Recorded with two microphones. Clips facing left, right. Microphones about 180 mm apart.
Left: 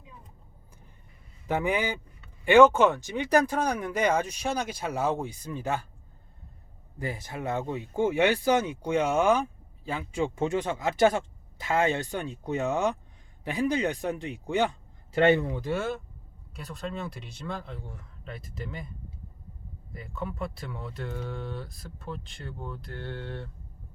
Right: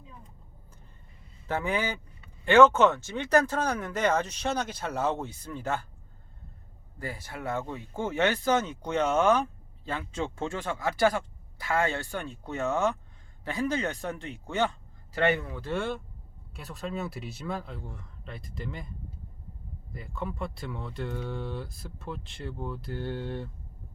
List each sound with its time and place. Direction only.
1.5 s speech: 15° left (ahead or behind)
7.0 s a man's voice: 20° left (ahead or behind)
15.7 s speech: 5° left (ahead or behind)
19.9 s speech: centre (ahead or behind)